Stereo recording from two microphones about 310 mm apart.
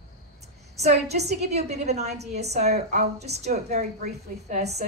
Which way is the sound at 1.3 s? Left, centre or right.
Right.